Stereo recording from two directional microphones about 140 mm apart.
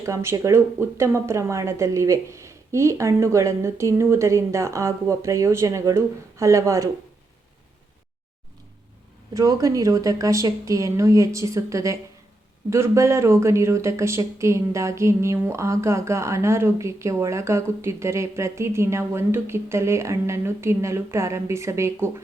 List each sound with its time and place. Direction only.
0.0 s speech: 20° right (ahead or behind)
9.3 s speech: 25° right (ahead or behind)